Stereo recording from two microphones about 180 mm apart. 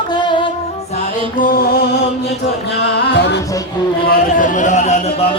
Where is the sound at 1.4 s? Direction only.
50° left (ahead or behind).